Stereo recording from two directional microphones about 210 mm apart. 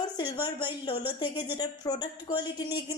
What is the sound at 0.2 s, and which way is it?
A woman's voice, 20° left (ahead or behind).